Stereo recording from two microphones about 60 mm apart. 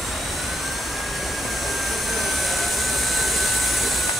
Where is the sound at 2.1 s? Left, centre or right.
Centre.